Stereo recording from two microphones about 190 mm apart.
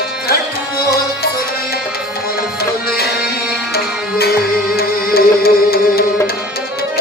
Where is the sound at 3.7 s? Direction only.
55° left (ahead or behind).